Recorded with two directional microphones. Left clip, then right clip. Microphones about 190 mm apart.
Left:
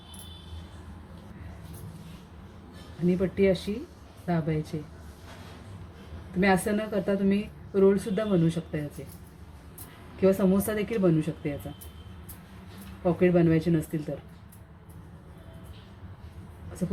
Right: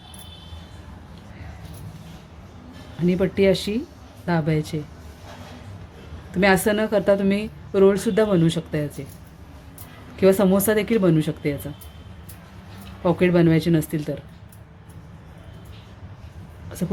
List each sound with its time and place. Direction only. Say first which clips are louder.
3.1 s a woman's voice: right 6 dB; 45° right (ahead or behind)
6.4 s a woman's voice: right 7 dB; 40° right (ahead or behind)
10.2 s a woman's voice: right 7 dB; 40° right (ahead or behind)
13.1 s a woman's voice: right 4 dB; 40° right (ahead or behind)